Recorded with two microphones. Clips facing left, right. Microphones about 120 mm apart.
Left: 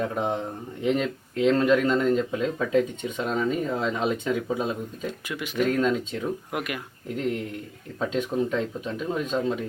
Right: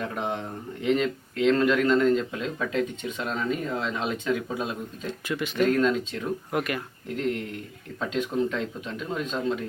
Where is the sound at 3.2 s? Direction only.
10° left (ahead or behind).